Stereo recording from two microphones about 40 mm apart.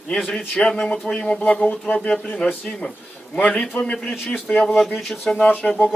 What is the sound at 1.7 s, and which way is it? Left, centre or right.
Speech, left.